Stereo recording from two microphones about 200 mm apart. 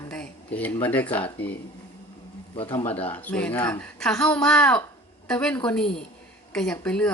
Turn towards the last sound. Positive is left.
turn(degrees=5)  # may be behind; listen again after turning